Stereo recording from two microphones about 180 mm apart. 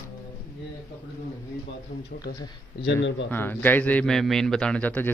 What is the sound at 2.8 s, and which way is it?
Speech, 80° left.